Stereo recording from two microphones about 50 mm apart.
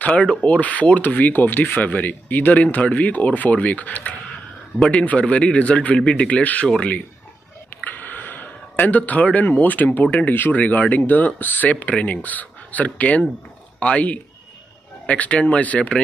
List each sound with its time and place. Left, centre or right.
0.0 s speech: left
4.7 s speech: centre
7.8 s a sound: left
10.3 s speech: left
11.7 s speech: left